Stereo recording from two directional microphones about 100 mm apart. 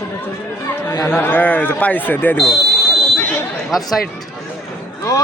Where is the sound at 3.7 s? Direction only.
Centre (ahead or behind).